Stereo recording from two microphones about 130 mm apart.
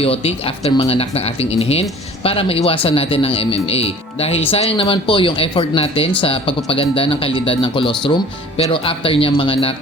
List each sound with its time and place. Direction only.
0.0 s speech: 45° left (ahead or behind)